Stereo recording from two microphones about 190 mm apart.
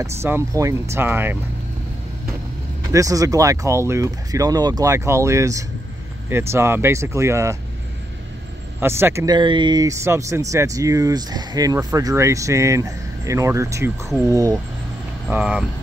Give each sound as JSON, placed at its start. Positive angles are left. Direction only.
{"t": 0.0, "sound": "speech", "side_deg": -15}
{"t": 2.9, "sound": "speech", "side_deg": -15}
{"t": 8.7, "sound": "speech", "side_deg": -10}
{"t": 15.2, "sound": "speech", "side_deg": -5}